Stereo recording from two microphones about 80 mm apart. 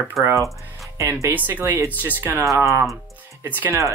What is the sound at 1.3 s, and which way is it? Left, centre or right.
Speech, right.